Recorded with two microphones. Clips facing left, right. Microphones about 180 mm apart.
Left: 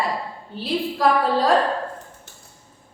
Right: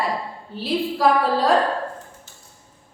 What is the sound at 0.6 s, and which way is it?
A woman's voice, centre (ahead or behind).